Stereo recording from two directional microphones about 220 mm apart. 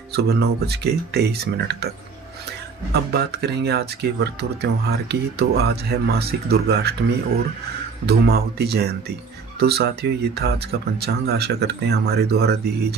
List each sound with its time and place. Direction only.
0.1 s speech: 45° right (ahead or behind)
2.9 s speech: 45° right (ahead or behind)
8.1 s speech: 50° right (ahead or behind)